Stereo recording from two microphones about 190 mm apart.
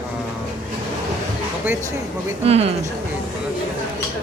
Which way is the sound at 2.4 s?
35° right (ahead or behind).